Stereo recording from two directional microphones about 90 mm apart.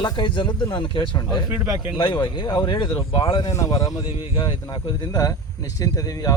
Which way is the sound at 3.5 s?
40° left (ahead or behind).